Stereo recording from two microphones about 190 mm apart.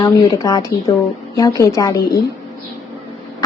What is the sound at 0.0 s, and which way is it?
A woman's voice, 20° left (ahead or behind).